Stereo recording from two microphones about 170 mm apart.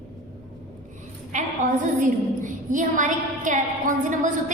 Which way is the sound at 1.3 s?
50° right (ahead or behind).